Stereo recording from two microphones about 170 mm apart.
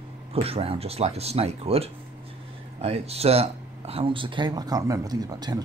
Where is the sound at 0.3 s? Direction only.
35° right (ahead or behind).